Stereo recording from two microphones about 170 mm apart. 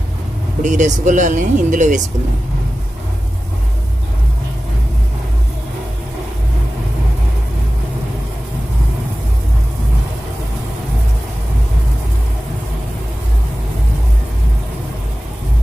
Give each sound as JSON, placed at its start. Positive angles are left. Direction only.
{"t": 0.6, "sound": "speech", "side_deg": -45}